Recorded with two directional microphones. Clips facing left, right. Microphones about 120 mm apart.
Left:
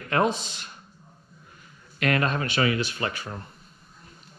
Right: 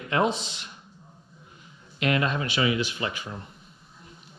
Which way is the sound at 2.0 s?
45° left (ahead or behind).